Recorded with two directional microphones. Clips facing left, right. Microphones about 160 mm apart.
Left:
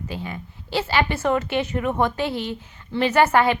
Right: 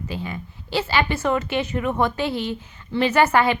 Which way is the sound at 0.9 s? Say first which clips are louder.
Left 1 dB; 55° left (ahead or behind).